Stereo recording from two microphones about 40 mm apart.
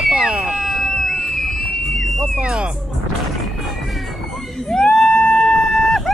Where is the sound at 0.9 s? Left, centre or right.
Centre.